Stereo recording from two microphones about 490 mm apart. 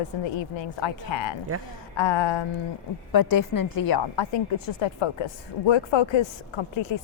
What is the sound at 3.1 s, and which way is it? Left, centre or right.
A woman's voice, left.